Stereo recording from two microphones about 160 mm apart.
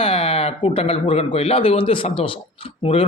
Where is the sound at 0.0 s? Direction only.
35° left (ahead or behind).